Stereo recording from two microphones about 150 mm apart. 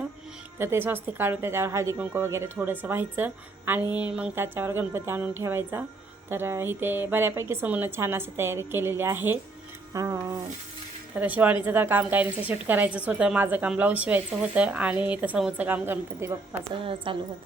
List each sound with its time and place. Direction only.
0.6 s a woman's voice: 15° right (ahead or behind)
11.2 s a woman's voice: 10° right (ahead or behind)
16.7 s a woman's voice: 35° right (ahead or behind)